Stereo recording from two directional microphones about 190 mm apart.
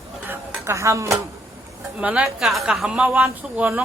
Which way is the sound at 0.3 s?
10° right (ahead or behind).